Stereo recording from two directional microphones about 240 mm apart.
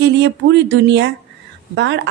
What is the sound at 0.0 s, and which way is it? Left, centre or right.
A woman's voice, right.